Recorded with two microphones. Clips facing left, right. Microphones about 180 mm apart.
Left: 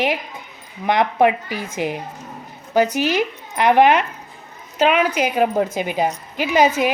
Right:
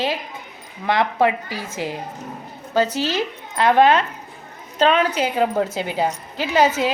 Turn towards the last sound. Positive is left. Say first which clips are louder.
# left 1 dB
turn(degrees=15)  # may be behind; listen again after turning